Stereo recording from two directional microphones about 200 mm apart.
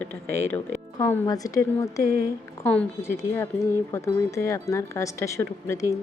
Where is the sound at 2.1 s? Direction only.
50° right (ahead or behind).